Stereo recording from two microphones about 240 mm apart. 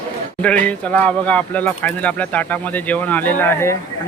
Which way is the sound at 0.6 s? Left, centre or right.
Centre.